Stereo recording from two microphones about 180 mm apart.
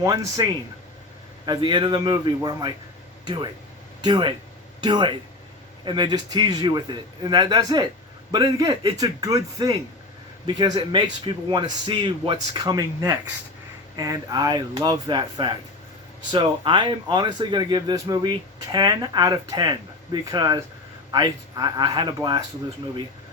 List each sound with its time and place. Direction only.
0.0 s speech: 20° right (ahead or behind)